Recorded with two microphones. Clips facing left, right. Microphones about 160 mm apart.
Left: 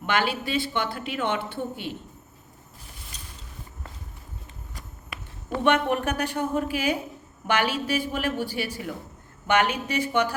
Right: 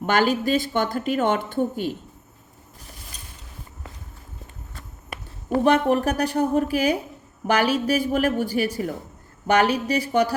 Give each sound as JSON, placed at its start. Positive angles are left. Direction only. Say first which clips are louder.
{"t": 0.0, "sound": "a woman's voice", "louder": "right 6 dB", "side_deg": -40}
{"t": 5.5, "sound": "a woman's voice", "louder": "right 4 dB", "side_deg": -35}